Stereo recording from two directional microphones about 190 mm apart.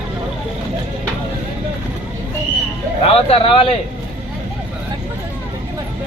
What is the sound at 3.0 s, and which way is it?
Speech, 30° left (ahead or behind).